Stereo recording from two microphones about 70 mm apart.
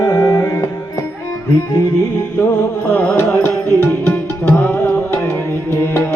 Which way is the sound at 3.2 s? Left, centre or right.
Left.